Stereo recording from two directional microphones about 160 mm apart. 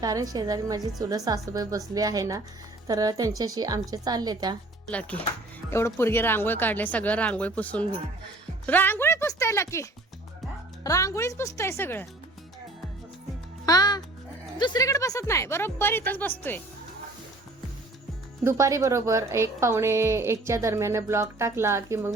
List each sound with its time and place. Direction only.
0.0 s a woman's voice: 20° right (ahead or behind)
4.9 s speech: 10° left (ahead or behind)
10.8 s speech: 20° left (ahead or behind)
13.7 s a child's voice: 25° left (ahead or behind)
18.4 s a woman's voice: 20° right (ahead or behind)